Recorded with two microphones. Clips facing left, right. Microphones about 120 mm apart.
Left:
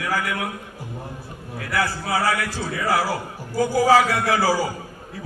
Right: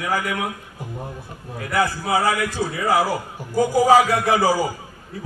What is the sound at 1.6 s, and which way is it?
A man's voice, 20° right (ahead or behind).